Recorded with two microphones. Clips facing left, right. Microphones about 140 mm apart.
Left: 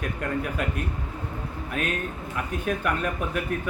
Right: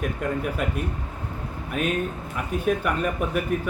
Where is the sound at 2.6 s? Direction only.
5° right (ahead or behind).